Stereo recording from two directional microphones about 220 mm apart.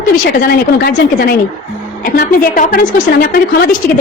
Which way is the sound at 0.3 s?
45° left (ahead or behind).